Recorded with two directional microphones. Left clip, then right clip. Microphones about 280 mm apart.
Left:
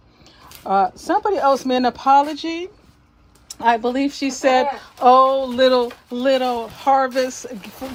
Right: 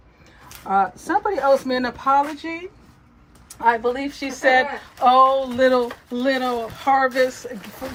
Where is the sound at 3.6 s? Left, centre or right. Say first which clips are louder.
Left 1 dB; left.